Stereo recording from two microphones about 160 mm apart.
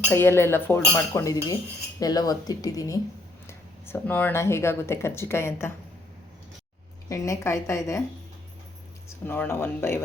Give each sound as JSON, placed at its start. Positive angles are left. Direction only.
{"t": 0.1, "sound": "speech", "side_deg": 15}
{"t": 7.1, "sound": "speech", "side_deg": 20}
{"t": 9.2, "sound": "speech", "side_deg": 10}